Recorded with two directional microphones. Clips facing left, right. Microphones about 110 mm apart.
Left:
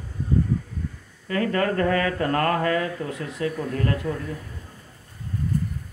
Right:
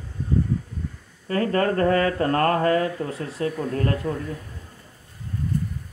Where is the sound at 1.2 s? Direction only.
35° right (ahead or behind).